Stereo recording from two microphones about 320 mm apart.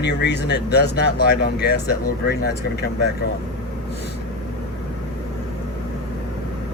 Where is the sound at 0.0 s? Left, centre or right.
Left.